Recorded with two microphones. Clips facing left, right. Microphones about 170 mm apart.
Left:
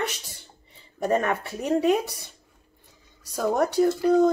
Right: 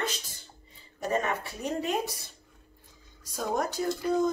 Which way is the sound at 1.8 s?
70° left (ahead or behind).